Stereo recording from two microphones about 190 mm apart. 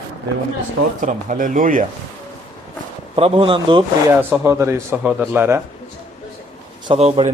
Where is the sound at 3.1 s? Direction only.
30° right (ahead or behind).